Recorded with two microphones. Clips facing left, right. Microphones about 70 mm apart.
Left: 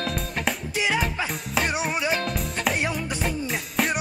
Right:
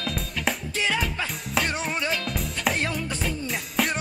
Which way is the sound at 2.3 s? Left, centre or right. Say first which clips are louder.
Left 1 dB; centre.